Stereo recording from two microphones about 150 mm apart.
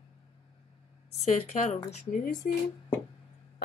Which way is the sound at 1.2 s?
50° left (ahead or behind).